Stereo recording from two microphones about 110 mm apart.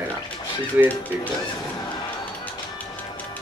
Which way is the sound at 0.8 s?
15° right (ahead or behind).